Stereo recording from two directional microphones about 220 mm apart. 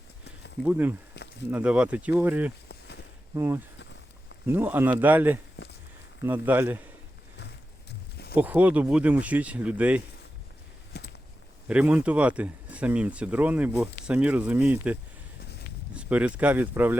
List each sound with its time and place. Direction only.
0.6 s speech: 10° right (ahead or behind)
1.1 s a sound: 50° left (ahead or behind)
1.5 s speech: 5° right (ahead or behind)
2.6 s a sound: 50° left (ahead or behind)
3.3 s speech: 10° right (ahead or behind)
8.4 s speech: 5° right (ahead or behind)
10.9 s a sound: 50° left (ahead or behind)
11.7 s speech: 5° right (ahead or behind)
16.0 s speech: 5° right (ahead or behind)